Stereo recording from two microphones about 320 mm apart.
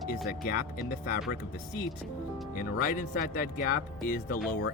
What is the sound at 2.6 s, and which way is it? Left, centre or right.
Speech, left.